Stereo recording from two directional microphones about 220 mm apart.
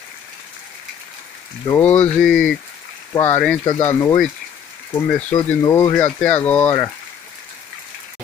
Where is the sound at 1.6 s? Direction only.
5° left (ahead or behind).